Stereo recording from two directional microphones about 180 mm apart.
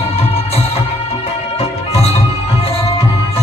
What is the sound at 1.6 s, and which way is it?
Music, 35° left (ahead or behind).